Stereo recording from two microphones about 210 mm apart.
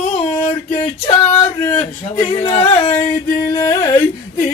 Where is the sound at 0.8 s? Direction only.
20° left (ahead or behind).